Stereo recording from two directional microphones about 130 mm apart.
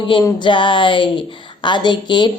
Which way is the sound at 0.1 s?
40° left (ahead or behind).